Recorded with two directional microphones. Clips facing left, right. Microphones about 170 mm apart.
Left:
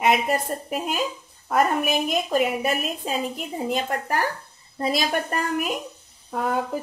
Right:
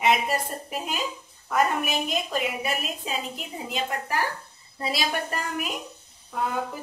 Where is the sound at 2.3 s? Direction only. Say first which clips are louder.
Left 6 dB; 45° left (ahead or behind).